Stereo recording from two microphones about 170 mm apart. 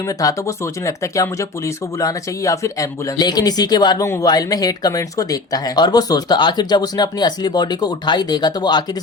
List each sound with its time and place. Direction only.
0.2 s speech: 20° left (ahead or behind)